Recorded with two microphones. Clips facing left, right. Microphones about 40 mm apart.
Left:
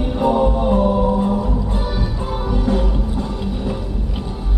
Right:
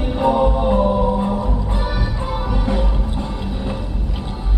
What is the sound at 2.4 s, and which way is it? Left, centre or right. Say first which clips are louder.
Music: left 4 dB; right.